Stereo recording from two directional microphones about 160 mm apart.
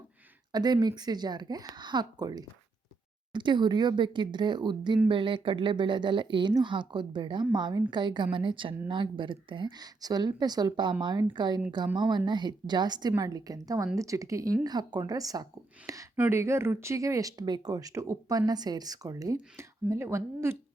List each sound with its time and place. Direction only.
0.5 s speech: 25° right (ahead or behind)
16.1 s speech: 10° right (ahead or behind)